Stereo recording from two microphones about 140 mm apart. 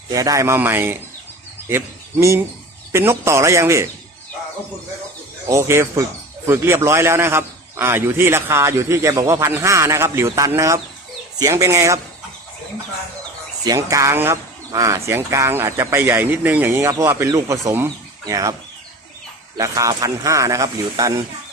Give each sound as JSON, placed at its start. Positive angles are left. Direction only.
{"t": 0.1, "sound": "a man's voice", "side_deg": -25}
{"t": 5.5, "sound": "speech", "side_deg": -20}
{"t": 13.7, "sound": "speech", "side_deg": -25}
{"t": 19.5, "sound": "speech", "side_deg": -25}